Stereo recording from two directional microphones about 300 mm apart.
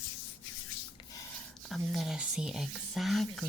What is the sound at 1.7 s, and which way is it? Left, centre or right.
Speech, centre.